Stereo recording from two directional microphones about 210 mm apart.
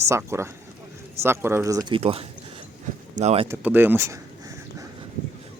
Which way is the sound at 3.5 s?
10° right (ahead or behind).